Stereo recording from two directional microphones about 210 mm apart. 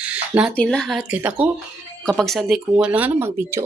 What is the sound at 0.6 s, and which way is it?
Speech, 5° left (ahead or behind).